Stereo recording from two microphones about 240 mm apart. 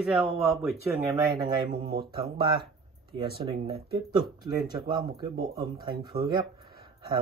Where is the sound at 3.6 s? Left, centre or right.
Centre.